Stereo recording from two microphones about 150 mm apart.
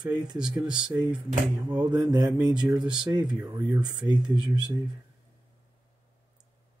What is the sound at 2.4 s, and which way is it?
Speech, 25° right (ahead or behind).